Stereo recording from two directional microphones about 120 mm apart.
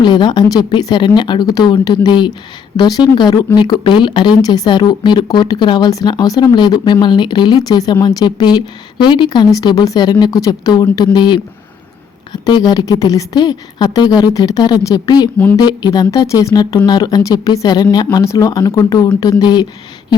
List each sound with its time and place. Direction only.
0.0 s a woman's voice: 40° left (ahead or behind)